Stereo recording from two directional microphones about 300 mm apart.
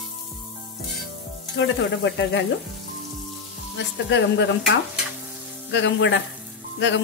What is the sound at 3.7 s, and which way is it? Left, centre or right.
Stir, left.